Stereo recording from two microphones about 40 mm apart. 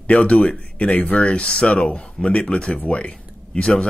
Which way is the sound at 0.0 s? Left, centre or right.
Left.